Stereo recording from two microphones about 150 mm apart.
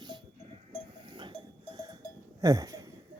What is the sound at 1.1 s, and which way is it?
Goat, 30° right (ahead or behind).